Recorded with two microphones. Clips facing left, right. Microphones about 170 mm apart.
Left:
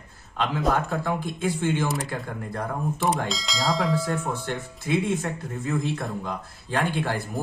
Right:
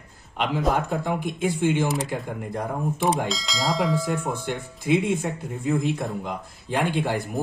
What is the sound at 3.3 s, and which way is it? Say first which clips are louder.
Speech: even; centre (ahead or behind).